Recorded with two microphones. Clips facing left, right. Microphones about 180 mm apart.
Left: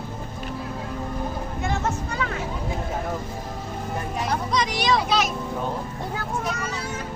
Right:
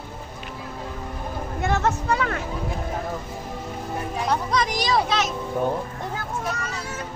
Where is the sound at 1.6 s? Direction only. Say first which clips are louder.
Right 5 dB; 65° right (ahead or behind).